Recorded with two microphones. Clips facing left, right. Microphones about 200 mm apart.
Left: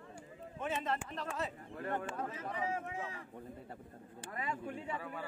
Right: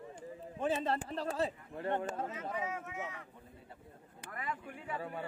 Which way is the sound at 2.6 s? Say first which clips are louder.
Left 2 dB; 30° left (ahead or behind).